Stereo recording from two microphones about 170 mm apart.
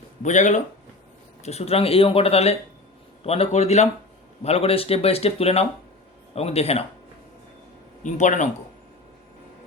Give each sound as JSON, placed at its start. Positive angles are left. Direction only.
{"t": 0.2, "sound": "speech", "side_deg": 45}
{"t": 8.0, "sound": "speech", "side_deg": 45}